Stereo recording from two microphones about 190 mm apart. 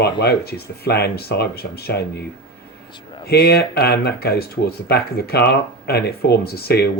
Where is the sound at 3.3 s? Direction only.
60° left (ahead or behind).